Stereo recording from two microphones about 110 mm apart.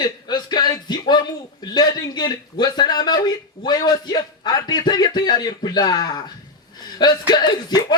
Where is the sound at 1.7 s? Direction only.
40° left (ahead or behind).